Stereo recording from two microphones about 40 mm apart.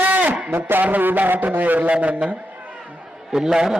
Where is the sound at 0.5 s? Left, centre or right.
Right.